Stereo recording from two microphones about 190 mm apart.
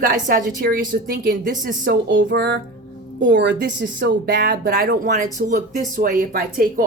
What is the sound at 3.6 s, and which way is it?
A woman's voice, 65° right (ahead or behind).